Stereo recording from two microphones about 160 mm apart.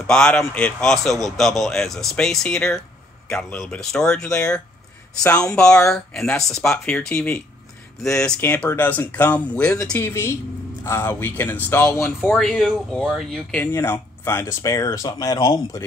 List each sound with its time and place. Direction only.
0.0 s a man's voice: 5° left (ahead or behind)
12.2 s speech: centre (ahead or behind); by 15.8 s 25° left (ahead or behind)